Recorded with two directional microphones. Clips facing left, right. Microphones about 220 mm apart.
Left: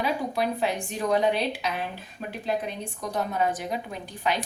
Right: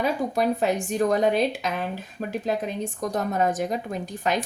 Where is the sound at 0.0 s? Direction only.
45° right (ahead or behind).